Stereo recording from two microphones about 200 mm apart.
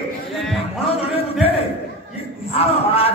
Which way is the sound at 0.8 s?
30° left (ahead or behind).